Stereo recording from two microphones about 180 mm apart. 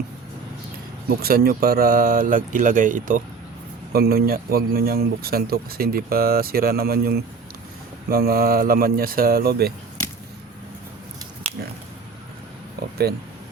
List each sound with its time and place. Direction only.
1.2 s speech: 55° right (ahead or behind)